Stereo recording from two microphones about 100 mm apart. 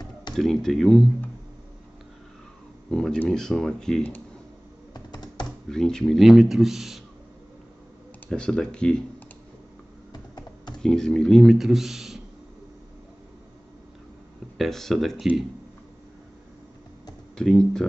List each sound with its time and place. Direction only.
0.4 s speech: 5° left (ahead or behind)
2.9 s speech: 10° left (ahead or behind)
4.9 s computer keyboard: 45° left (ahead or behind)
5.7 s speech: 5° left (ahead or behind)
8.3 s speech: 5° left (ahead or behind)
10.1 s computer keyboard: 45° left (ahead or behind)
10.8 s speech: 5° left (ahead or behind)
14.6 s speech: 5° left (ahead or behind)
17.4 s speech: 5° left (ahead or behind)